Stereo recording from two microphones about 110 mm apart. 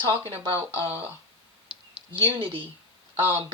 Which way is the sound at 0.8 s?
60° right (ahead or behind).